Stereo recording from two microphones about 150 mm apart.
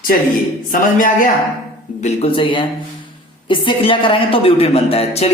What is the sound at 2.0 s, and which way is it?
A woman's voice, 40° left (ahead or behind).